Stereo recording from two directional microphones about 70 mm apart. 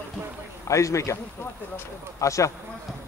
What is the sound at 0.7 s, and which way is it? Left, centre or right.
A man's voice, left.